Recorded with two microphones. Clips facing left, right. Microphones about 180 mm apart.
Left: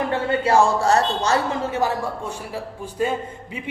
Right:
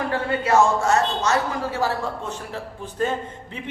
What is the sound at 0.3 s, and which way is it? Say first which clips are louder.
Speech: left 1 dB; 30° left (ahead or behind).